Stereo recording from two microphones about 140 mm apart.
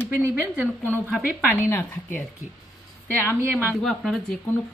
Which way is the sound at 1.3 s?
15° left (ahead or behind).